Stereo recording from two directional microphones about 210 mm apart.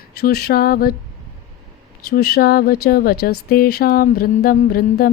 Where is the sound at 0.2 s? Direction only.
50° left (ahead or behind).